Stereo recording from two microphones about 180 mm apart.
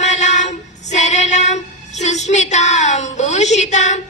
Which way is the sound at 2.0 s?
40° left (ahead or behind).